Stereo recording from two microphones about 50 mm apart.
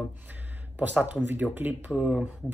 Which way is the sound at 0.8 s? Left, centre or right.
Right.